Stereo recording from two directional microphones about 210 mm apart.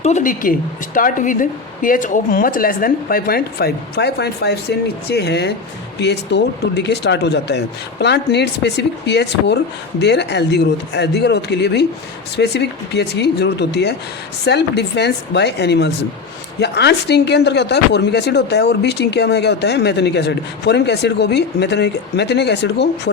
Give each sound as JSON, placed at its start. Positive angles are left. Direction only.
{"t": 0.0, "sound": "a woman's voice", "side_deg": 35}